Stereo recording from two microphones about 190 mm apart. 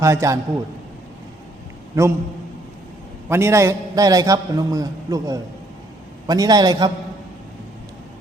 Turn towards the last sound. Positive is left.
turn(degrees=-20)  # may be behind; listen again after turning